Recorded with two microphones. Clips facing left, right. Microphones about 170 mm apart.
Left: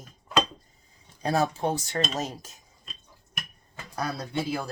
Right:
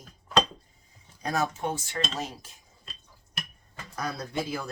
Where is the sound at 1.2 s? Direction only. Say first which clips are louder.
Left 4 dB; 30° left (ahead or behind).